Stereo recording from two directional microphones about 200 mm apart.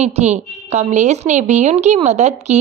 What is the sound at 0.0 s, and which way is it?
A woman's voice, 35° right (ahead or behind).